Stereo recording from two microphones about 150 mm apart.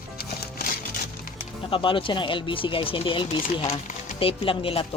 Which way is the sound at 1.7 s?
35° left (ahead or behind).